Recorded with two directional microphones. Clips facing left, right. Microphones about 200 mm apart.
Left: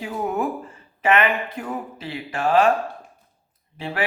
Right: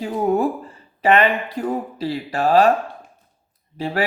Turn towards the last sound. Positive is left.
turn(degrees=-40)  # may be behind; listen again after turning